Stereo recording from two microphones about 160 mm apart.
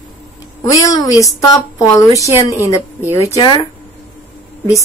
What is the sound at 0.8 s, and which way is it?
A woman's voice, 20° left (ahead or behind).